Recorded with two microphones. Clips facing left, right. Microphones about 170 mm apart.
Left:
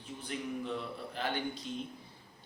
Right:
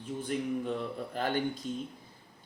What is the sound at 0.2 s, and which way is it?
Speech, 50° right (ahead or behind).